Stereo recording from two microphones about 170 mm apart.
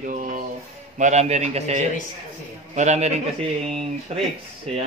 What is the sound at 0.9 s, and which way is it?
A man's voice, 45° right (ahead or behind).